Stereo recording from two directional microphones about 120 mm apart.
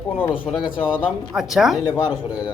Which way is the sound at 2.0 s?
35° left (ahead or behind).